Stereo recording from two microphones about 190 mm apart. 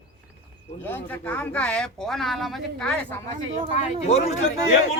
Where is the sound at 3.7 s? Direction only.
35° left (ahead or behind).